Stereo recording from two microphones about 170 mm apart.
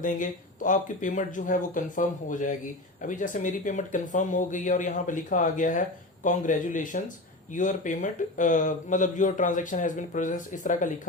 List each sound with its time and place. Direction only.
0.0 s speech: 50° left (ahead or behind)